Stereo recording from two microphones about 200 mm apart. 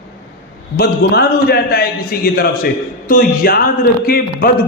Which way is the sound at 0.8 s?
55° left (ahead or behind).